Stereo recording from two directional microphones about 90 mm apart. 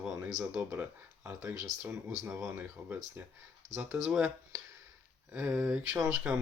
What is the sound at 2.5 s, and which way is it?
Speech, 20° right (ahead or behind).